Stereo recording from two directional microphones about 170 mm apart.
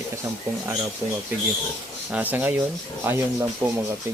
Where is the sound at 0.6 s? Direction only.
15° right (ahead or behind).